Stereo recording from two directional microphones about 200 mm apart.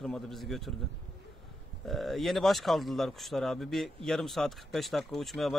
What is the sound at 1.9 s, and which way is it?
Speech, centre (ahead or behind).